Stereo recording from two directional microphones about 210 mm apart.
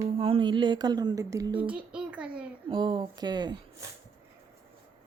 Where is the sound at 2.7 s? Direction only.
20° right (ahead or behind).